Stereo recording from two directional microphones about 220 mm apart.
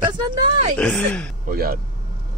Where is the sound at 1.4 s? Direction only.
45° right (ahead or behind).